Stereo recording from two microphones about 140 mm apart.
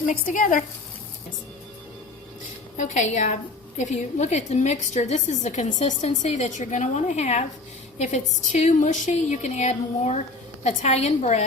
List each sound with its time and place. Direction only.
0.0 s speech: 75° left (ahead or behind)
2.7 s a woman's voice: 60° left (ahead or behind)